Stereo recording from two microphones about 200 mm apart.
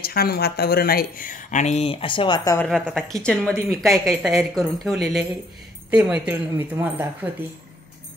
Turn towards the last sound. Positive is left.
turn(degrees=-10)  # may be behind; listen again after turning